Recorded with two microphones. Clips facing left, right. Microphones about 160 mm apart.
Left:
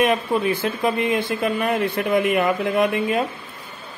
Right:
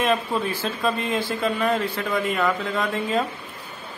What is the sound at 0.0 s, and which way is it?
Speech, 15° left (ahead or behind).